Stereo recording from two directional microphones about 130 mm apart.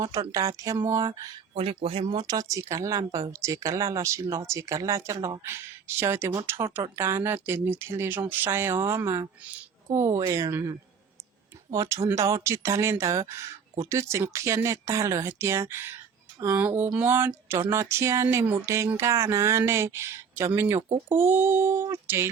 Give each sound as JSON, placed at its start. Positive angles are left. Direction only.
{"t": 0.0, "sound": "speech", "side_deg": -25}
{"t": 1.5, "sound": "speech", "side_deg": -45}